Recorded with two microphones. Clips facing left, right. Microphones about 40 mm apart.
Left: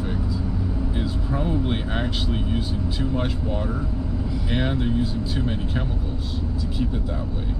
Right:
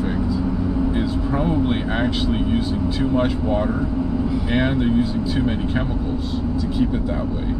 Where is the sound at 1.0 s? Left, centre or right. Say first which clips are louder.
Right 5 dB; centre.